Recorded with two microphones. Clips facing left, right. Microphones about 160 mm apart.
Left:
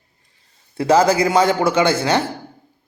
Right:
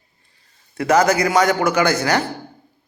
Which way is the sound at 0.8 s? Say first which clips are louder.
Left 1 dB; 30° left (ahead or behind).